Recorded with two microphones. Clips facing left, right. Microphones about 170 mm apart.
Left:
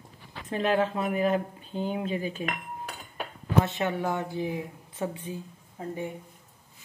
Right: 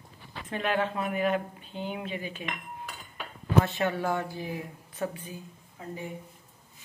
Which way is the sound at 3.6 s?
20° left (ahead or behind).